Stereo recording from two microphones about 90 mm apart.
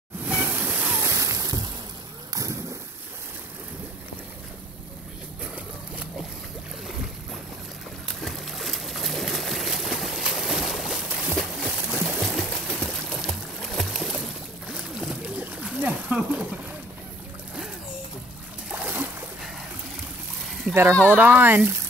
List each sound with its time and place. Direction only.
0.2 s a sound: 20° right (ahead or behind)
1.0 s a sound: 35° right (ahead or behind)
8.1 s a sound: 5° left (ahead or behind)
13.2 s music: 5° left (ahead or behind)
14.7 s boat: 5° right (ahead or behind)
15.3 s splash: 15° right (ahead or behind)
18.7 s splash: 20° right (ahead or behind)
20.9 s speech: 15° left (ahead or behind)
21.2 s speech: 20° right (ahead or behind)